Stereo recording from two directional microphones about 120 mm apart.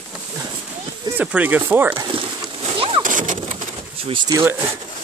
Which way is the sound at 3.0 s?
90° right.